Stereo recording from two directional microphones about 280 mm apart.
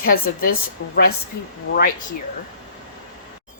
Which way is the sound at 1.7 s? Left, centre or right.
Left.